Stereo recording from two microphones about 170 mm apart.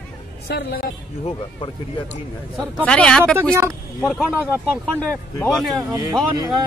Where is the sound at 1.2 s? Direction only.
30° left (ahead or behind).